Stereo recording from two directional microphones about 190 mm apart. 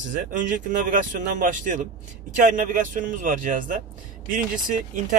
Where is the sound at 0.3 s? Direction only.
45° right (ahead or behind).